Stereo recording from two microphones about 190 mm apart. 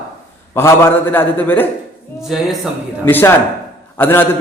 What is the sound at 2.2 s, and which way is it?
Speech, centre (ahead or behind).